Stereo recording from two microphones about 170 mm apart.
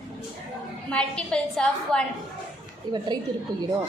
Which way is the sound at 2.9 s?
25° right (ahead or behind).